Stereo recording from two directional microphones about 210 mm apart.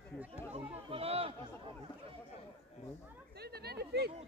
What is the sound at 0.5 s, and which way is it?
Chatter, 25° right (ahead or behind).